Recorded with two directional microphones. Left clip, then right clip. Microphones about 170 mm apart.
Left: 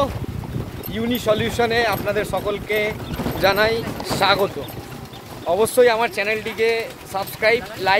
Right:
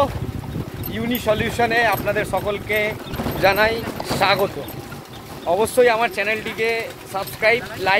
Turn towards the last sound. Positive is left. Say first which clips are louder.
# even
turn(degrees=25)  # may be behind; listen again after turning